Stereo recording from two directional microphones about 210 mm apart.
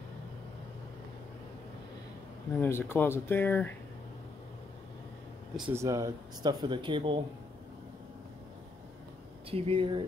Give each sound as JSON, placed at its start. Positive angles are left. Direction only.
{"t": 2.6, "sound": "speech", "side_deg": 10}
{"t": 5.7, "sound": "speech", "side_deg": -15}
{"t": 9.5, "sound": "speech", "side_deg": -25}